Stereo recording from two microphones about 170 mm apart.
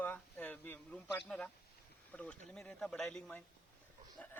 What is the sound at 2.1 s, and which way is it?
A man's voice, 10° left (ahead or behind).